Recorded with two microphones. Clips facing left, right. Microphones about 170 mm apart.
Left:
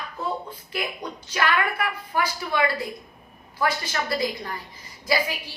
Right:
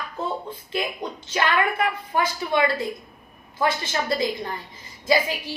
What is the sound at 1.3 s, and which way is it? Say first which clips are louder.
A woman's voice: right 2 dB; 25° right (ahead or behind).